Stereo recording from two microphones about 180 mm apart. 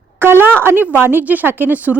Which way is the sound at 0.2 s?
10° right (ahead or behind).